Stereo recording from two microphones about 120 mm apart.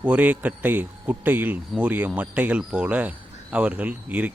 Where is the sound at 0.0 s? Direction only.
10° right (ahead or behind).